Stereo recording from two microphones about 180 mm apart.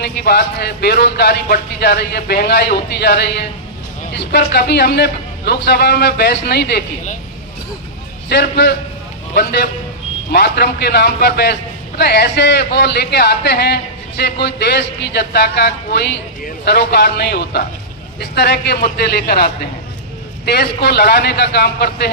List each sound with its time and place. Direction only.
0.0 s a man's voice: 65° left (ahead or behind)
8.3 s a man's voice: 70° left (ahead or behind)